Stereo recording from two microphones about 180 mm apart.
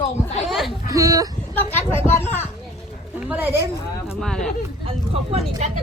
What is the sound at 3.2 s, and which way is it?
Speech, 10° right (ahead or behind).